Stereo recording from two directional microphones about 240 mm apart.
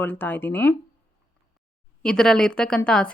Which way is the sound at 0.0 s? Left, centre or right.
Centre.